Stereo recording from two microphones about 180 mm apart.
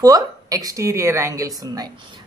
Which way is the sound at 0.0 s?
20° right (ahead or behind).